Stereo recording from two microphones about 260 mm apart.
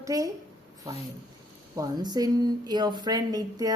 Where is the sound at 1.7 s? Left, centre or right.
Centre.